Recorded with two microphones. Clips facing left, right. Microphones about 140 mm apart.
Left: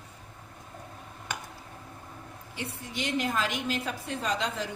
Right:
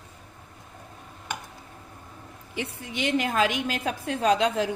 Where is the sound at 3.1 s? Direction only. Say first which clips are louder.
Right 6 dB; 70° right (ahead or behind).